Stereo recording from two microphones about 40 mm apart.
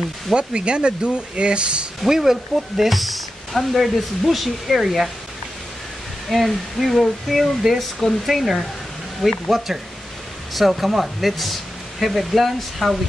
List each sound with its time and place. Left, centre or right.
0.3 s speech: right
2.0 s speech: centre
6.2 s speech: centre
10.5 s speech: centre